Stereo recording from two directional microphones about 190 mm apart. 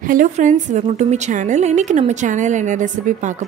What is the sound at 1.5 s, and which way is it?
A woman's voice, 40° right (ahead or behind).